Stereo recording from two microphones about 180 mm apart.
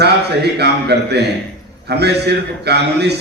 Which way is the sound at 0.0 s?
65° right (ahead or behind).